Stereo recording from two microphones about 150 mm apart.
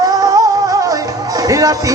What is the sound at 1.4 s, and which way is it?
Music, 25° right (ahead or behind).